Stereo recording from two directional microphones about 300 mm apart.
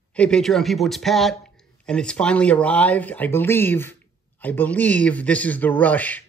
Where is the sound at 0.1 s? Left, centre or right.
Centre.